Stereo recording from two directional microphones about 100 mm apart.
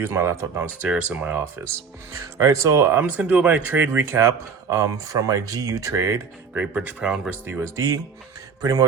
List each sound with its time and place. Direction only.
0.0 s speech: 25° right (ahead or behind)
0.9 s speech: 15° right (ahead or behind)
1.6 s speech: 30° right (ahead or behind)
6.5 s speech: 15° right (ahead or behind)
7.4 s speech: 25° right (ahead or behind)